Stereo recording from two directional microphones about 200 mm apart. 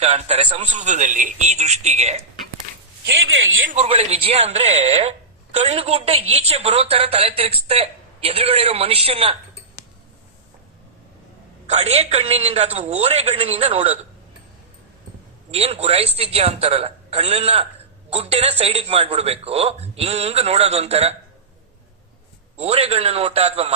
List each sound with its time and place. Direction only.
0.0 s a man's voice: 30° right (ahead or behind)
3.7 s a man's voice: 30° right (ahead or behind)
11.6 s a woman's voice: 30° right (ahead or behind)
15.5 s a man's voice: 30° right (ahead or behind)
22.5 s a man's voice: 30° right (ahead or behind)